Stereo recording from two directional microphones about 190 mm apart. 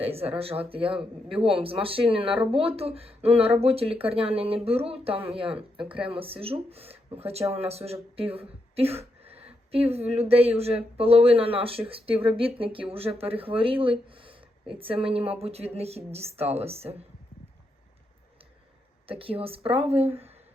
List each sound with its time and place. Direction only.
0.0 s speech: 30° right (ahead or behind)
19.0 s speech: 30° right (ahead or behind)